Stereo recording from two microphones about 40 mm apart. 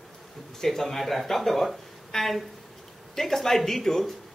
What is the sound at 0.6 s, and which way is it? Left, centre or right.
Speech, centre.